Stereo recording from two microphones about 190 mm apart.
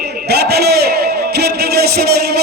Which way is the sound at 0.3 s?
60° right (ahead or behind).